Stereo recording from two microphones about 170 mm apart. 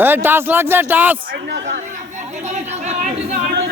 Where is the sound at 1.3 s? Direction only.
85° right.